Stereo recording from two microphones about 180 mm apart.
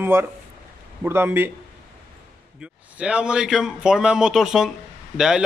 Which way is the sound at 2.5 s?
5° right (ahead or behind).